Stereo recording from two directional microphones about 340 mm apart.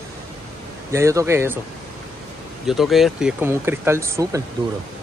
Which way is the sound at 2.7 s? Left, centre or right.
Centre.